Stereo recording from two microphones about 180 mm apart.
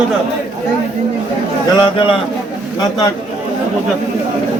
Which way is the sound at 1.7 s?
25° left (ahead or behind).